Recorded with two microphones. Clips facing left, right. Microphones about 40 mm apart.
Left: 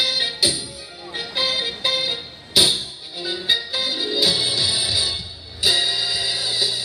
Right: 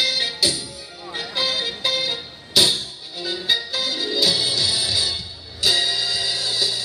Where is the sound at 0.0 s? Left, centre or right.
Centre.